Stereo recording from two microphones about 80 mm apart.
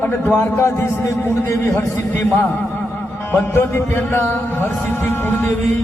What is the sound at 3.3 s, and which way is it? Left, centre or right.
A man's voice, left.